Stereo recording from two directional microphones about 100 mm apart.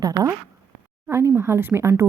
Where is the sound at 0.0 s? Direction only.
40° right (ahead or behind).